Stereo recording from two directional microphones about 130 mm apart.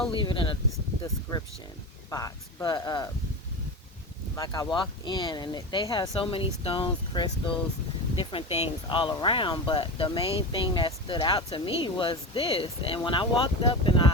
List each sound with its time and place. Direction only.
0.1 s speech: 40° left (ahead or behind)
2.0 s speech: 25° left (ahead or behind)
4.4 s speech: 30° left (ahead or behind)